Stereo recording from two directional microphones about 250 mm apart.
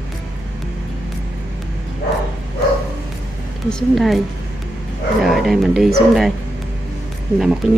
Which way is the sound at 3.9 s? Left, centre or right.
Centre.